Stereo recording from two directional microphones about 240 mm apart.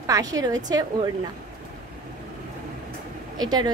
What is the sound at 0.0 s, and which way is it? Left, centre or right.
Speech, centre.